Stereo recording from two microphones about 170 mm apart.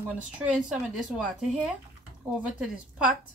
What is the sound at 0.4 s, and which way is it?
A woman's voice, 5° right (ahead or behind).